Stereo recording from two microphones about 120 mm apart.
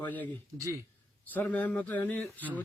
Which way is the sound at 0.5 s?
25° right (ahead or behind).